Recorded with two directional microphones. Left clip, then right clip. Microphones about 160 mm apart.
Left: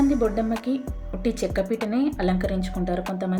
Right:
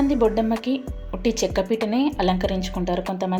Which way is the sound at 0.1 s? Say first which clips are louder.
Right 3 dB; 10° right (ahead or behind).